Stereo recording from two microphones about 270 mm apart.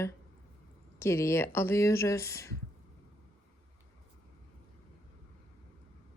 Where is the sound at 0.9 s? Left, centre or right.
Centre.